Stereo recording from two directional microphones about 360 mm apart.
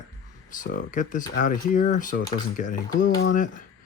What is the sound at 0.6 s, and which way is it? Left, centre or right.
Speech, left.